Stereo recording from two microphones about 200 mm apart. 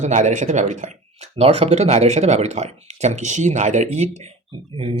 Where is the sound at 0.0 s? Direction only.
35° right (ahead or behind).